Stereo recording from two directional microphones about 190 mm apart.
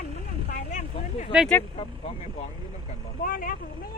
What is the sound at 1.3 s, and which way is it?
Speech, 5° right (ahead or behind).